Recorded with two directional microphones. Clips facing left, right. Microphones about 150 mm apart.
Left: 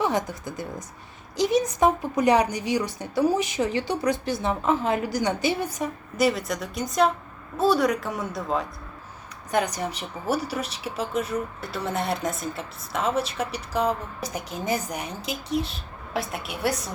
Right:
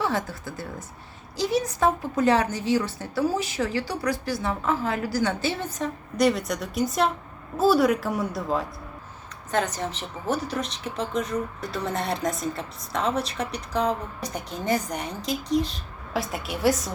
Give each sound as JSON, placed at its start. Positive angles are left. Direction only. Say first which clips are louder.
{"t": 0.0, "sound": "a woman's voice", "louder": "left 2 dB", "side_deg": 20}
{"t": 9.5, "sound": "a woman's voice", "louder": "left 1 dB", "side_deg": 10}
{"t": 16.1, "sound": "a woman's voice", "louder": "right 1 dB", "side_deg": 0}